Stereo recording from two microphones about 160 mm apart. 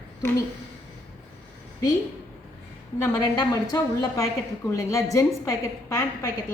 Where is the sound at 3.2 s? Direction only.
25° left (ahead or behind).